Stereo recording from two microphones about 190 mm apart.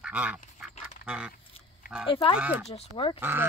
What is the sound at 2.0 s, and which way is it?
Speech, 25° left (ahead or behind).